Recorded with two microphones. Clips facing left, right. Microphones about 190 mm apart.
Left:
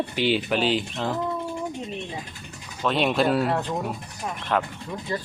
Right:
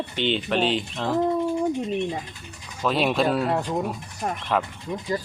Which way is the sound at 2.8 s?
Centre (ahead or behind).